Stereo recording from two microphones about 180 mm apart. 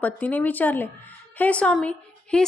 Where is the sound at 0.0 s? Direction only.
10° left (ahead or behind).